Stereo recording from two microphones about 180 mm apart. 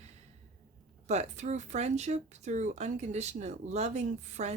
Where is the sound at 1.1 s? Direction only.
40° right (ahead or behind).